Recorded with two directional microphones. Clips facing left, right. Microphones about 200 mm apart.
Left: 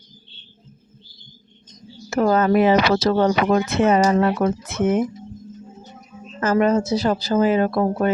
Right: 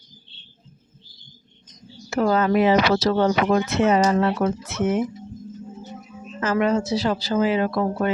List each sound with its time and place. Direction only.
2.0 s speech: 45° left (ahead or behind)
6.4 s speech: 40° left (ahead or behind)